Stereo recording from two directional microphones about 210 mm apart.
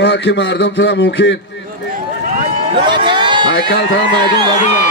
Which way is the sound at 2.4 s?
25° right (ahead or behind).